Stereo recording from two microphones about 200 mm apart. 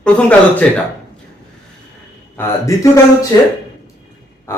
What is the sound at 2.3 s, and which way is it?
Speech, 15° left (ahead or behind).